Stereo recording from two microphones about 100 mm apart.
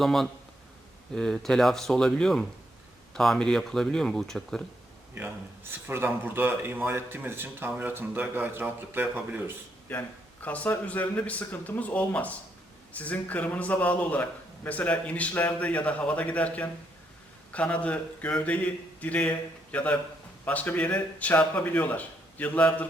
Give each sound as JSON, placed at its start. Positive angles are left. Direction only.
{"t": 0.0, "sound": "speech", "side_deg": 0}
{"t": 5.9, "sound": "a man's voice", "side_deg": -20}
{"t": 10.4, "sound": "a man's voice", "side_deg": 15}